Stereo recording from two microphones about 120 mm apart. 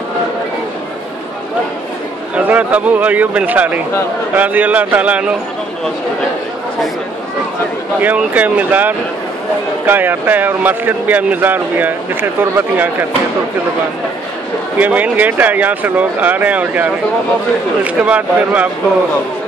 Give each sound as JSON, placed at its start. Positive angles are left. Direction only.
{"t": 2.3, "sound": "speech", "side_deg": -15}
{"t": 8.0, "sound": "speech", "side_deg": -15}
{"t": 14.8, "sound": "speech", "side_deg": -15}